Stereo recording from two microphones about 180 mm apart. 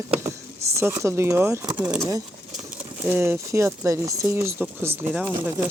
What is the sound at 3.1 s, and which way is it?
Speech, 15° right (ahead or behind).